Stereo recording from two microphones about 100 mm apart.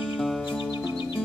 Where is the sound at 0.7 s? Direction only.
50° left (ahead or behind).